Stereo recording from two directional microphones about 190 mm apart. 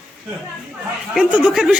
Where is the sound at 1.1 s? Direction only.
5° right (ahead or behind).